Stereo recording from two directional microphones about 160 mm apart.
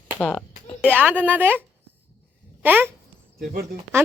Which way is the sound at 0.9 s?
10° right (ahead or behind).